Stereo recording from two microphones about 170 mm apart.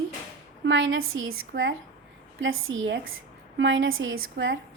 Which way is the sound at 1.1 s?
90° right.